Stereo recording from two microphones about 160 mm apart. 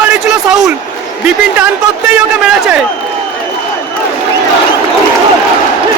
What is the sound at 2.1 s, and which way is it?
Speech, 10° right (ahead or behind).